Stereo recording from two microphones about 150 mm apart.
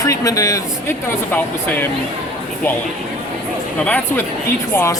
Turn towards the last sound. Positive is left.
turn(degrees=20)  # may be behind; listen again after turning